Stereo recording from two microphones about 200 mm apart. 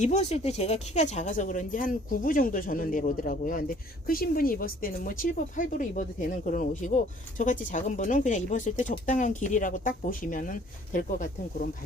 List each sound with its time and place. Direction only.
0.0 s speech: 35° left (ahead or behind)